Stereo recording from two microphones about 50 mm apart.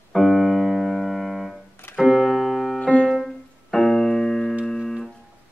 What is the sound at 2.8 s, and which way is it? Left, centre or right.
Piano, left.